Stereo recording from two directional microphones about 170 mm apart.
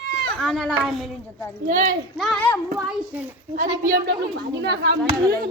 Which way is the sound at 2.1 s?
Centre (ahead or behind).